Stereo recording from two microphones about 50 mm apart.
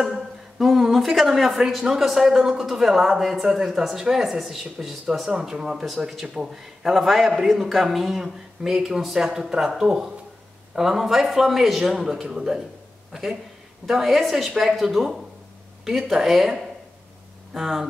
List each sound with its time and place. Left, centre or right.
0.0 s a woman's voice: centre
9.7 s speech: right
10.7 s a man's voice: centre